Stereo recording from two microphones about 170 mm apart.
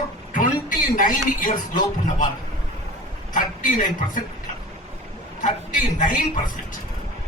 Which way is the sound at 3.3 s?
50° left (ahead or behind).